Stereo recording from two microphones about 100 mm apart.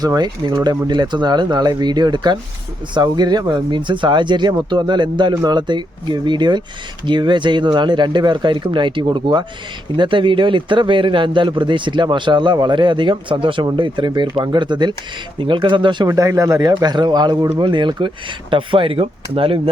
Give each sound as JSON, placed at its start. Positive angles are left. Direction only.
{"t": 0.0, "sound": "speech", "side_deg": -40}
{"t": 16.0, "sound": "speech", "side_deg": -30}